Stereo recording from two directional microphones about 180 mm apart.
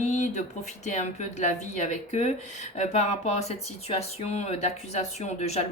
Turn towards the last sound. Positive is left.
turn(degrees=35)  # may be behind; listen again after turning